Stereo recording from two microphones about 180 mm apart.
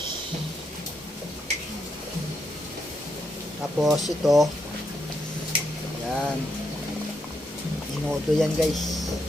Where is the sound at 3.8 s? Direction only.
Centre (ahead or behind).